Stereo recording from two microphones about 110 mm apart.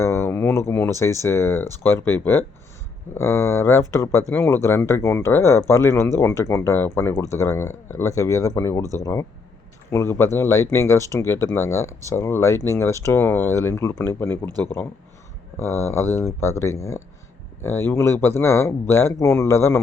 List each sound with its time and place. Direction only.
0.0 s a sound: 25° left (ahead or behind)
1.8 s speech: 20° left (ahead or behind)
9.9 s speech: 25° left (ahead or behind)